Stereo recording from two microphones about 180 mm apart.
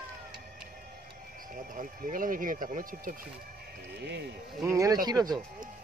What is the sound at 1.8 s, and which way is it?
Speech, 50° right (ahead or behind).